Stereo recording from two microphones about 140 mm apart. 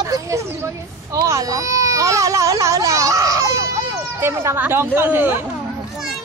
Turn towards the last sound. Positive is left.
turn(degrees=-15)  # may be behind; listen again after turning